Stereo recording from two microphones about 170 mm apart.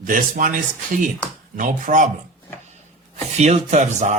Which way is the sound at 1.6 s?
50° right (ahead or behind).